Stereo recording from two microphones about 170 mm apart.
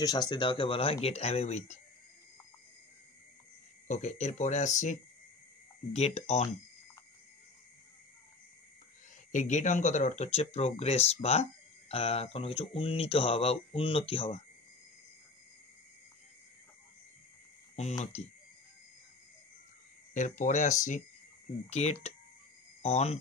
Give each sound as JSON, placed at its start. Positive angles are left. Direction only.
{"t": 0.0, "sound": "speech", "side_deg": 25}
{"t": 3.8, "sound": "speech", "side_deg": 45}
{"t": 5.9, "sound": "speech", "side_deg": 40}
{"t": 9.3, "sound": "speech", "side_deg": 45}
{"t": 18.0, "sound": "speech", "side_deg": 40}
{"t": 20.2, "sound": "speech", "side_deg": 50}